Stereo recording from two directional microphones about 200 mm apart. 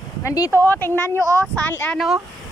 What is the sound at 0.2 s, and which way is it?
Speech, 15° left (ahead or behind).